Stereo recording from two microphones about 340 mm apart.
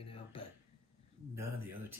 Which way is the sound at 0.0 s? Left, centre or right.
Centre.